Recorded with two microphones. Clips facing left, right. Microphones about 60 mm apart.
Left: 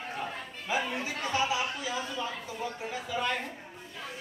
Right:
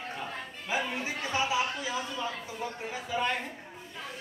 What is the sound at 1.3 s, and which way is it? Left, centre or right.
Speech, right.